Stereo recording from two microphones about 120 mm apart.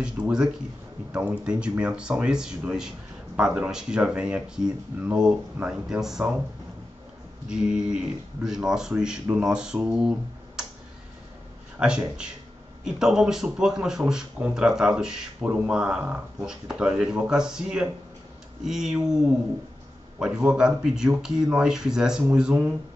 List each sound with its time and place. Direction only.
0.0 s speech: 5° right (ahead or behind)
7.4 s speech: 5° right (ahead or behind)
11.8 s speech: 5° right (ahead or behind)
20.2 s speech: 5° right (ahead or behind)